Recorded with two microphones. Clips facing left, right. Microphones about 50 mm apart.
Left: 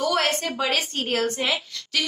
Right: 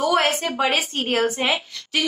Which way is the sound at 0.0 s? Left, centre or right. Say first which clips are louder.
Right 3 dB; centre.